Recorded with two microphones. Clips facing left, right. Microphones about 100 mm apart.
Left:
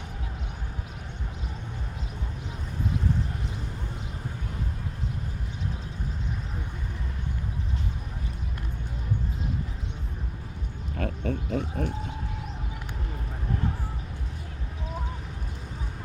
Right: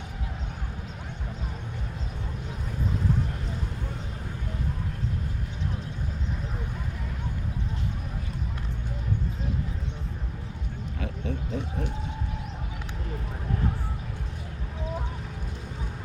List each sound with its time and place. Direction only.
10.9 s oink: 50° left (ahead or behind)